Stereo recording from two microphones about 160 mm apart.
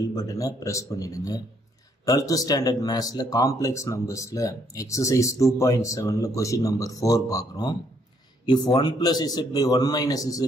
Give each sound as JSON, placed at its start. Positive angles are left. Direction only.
{"t": 0.1, "sound": "speech", "side_deg": 20}